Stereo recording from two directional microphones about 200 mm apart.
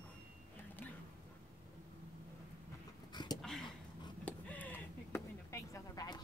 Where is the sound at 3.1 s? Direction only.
20° left (ahead or behind).